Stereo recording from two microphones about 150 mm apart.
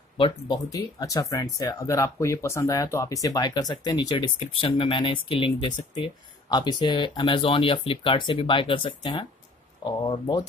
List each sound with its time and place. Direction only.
0.2 s speech: 25° left (ahead or behind)